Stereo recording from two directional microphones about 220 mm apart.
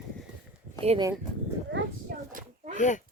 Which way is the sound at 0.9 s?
20° right (ahead or behind).